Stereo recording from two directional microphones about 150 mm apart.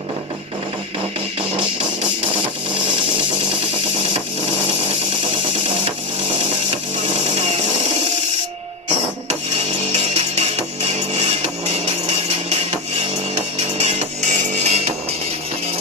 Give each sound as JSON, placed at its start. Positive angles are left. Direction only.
{"t": 10.1, "sound": "music", "side_deg": -45}
{"t": 13.8, "sound": "music", "side_deg": -55}